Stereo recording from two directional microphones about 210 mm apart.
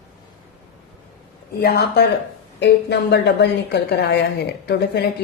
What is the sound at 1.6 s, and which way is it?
A woman's voice, 45° left (ahead or behind).